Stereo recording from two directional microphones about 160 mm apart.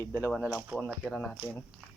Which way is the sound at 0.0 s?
15° left (ahead or behind).